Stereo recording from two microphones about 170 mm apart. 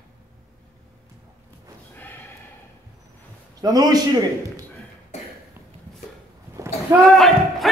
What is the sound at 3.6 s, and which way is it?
A man's voice, 20° right (ahead or behind).